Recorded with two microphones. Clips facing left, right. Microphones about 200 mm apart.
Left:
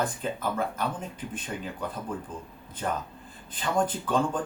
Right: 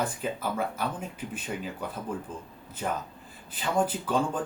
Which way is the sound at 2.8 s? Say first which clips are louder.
Left 1 dB; 5° right (ahead or behind).